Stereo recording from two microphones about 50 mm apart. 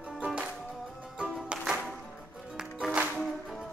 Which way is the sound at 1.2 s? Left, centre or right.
Centre.